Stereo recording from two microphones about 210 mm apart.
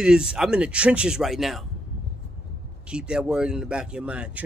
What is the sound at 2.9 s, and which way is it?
Speech, 5° right (ahead or behind).